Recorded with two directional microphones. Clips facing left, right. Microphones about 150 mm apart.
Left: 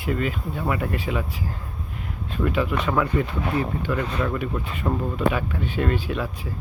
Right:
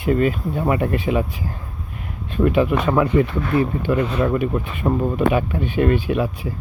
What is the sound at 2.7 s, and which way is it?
Speech, 25° right (ahead or behind).